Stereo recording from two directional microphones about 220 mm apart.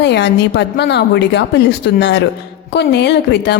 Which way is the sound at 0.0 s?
50° left (ahead or behind).